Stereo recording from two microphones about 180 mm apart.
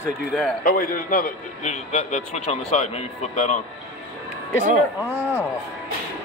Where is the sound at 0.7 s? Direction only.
50° left (ahead or behind).